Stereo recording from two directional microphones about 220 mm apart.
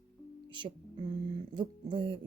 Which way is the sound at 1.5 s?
25° right (ahead or behind).